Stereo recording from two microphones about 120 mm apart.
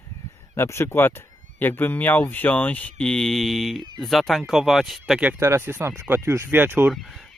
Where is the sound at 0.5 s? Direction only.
20° left (ahead or behind); by 5.2 s centre (ahead or behind).